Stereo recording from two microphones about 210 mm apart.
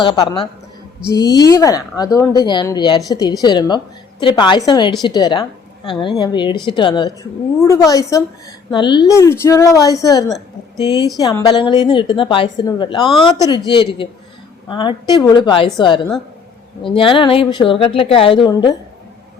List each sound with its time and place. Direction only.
0.0 s a woman's voice: 20° left (ahead or behind)
14.7 s a woman's voice: 20° left (ahead or behind)